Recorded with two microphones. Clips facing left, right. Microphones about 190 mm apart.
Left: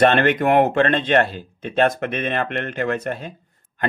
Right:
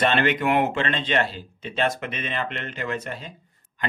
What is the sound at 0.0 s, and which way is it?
A man's voice, 50° left (ahead or behind).